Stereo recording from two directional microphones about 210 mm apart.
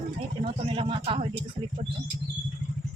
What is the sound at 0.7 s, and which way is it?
Speech, 25° right (ahead or behind).